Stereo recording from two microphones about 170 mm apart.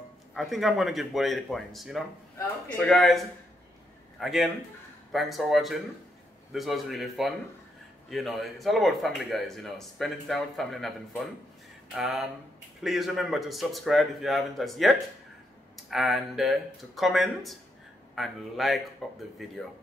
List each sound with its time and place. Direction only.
0.3 s speech: centre (ahead or behind)